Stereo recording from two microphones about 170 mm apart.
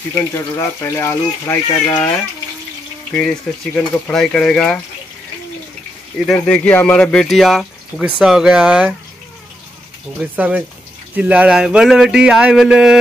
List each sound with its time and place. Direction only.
0.3 s speech: 15° left (ahead or behind)
3.1 s speech: 5° left (ahead or behind)
6.4 s speech: 5° left (ahead or behind)
10.3 s speech: 10° right (ahead or behind)